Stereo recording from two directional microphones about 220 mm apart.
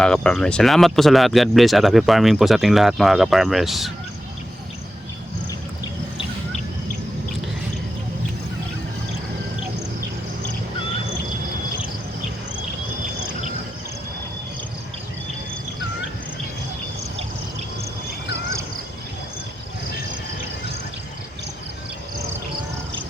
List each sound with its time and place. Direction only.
0.0 s speech: 5° left (ahead or behind)
5.5 s insect: 20° left (ahead or behind)